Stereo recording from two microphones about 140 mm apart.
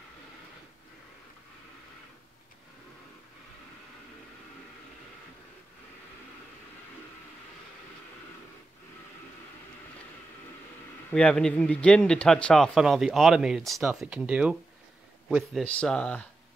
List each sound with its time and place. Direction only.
11.1 s speech: 5° left (ahead or behind)